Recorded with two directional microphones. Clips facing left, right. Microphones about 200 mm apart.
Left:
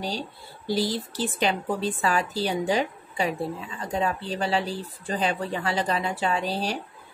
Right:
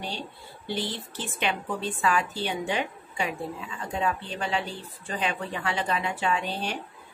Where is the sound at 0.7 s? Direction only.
35° left (ahead or behind).